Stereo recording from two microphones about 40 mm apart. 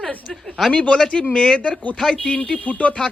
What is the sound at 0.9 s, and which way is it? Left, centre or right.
Speech, centre.